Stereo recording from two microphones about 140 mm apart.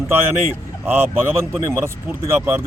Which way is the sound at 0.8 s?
15° right (ahead or behind).